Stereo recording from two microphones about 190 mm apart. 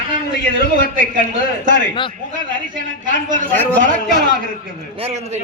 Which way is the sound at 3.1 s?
45° right (ahead or behind).